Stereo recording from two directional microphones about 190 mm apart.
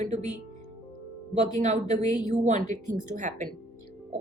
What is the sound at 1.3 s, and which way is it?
A woman's voice, 35° right (ahead or behind).